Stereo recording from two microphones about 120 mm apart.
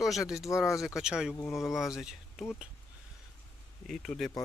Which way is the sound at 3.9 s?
5° left (ahead or behind).